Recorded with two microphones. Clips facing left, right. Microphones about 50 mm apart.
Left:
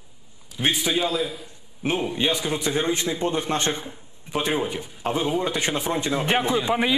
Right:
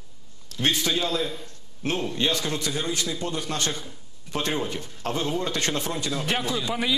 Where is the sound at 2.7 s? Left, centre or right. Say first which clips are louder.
Left 5 dB; left.